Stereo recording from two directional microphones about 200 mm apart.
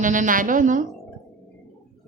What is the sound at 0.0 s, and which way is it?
Speech, 40° right (ahead or behind).